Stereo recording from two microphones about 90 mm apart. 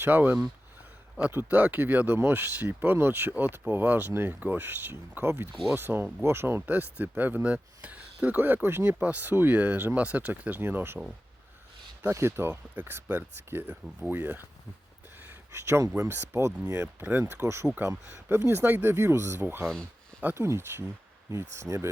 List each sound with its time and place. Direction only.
0.0 s speech: 20° right (ahead or behind)
12.1 s speech: 30° right (ahead or behind)
15.2 s a sound: 25° right (ahead or behind)
16.0 s speech: 30° right (ahead or behind)
16.8 s speech: 20° right (ahead or behind)
17.4 s speech: 30° right (ahead or behind)